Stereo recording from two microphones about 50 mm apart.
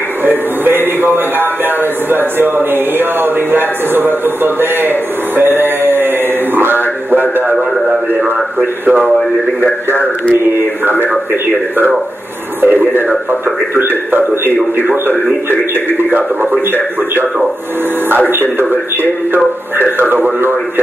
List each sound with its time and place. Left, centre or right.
0.2 s speech: right
6.5 s a sound: right
12.6 s speech: right
16.0 s speech: right
19.3 s speech: right